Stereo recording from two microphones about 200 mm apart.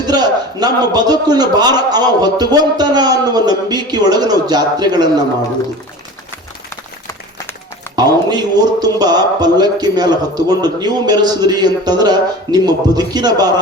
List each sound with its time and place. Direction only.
0.1 s a man's voice: 20° right (ahead or behind)
7.9 s a man's voice: 20° right (ahead or behind)